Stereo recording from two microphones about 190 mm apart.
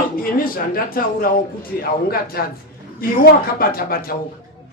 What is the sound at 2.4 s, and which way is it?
Speech, 50° left (ahead or behind).